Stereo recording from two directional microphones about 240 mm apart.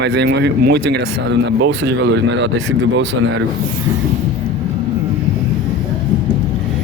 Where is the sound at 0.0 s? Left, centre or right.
Right.